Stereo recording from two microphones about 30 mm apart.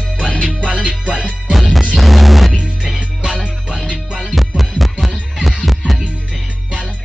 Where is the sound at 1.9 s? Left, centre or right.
Centre.